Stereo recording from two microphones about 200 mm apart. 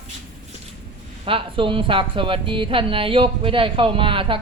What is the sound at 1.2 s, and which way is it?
A woman's voice, 25° right (ahead or behind).